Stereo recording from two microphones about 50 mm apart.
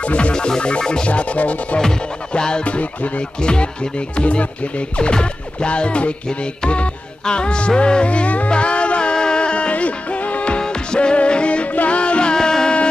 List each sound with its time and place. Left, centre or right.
0.0 s music: left
1.8 s music: centre